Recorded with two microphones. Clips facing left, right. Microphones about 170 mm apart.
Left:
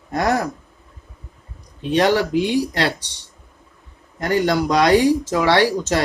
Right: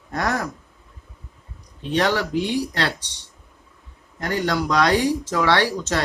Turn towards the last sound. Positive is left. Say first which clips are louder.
# left 4 dB
turn(degrees=15)  # may be behind; listen again after turning